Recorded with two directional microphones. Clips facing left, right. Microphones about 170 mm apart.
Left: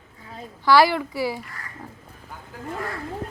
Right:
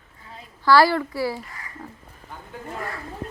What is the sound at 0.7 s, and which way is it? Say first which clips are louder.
Speech: even; 20° left (ahead or behind).